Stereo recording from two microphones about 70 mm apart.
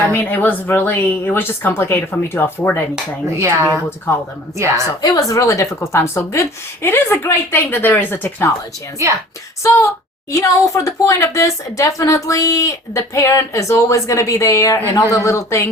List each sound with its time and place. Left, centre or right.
0.1 s speech: left
3.3 s speech: right
4.1 s speech: left
4.5 s speech: right
5.0 s speech: left
10.3 s speech: left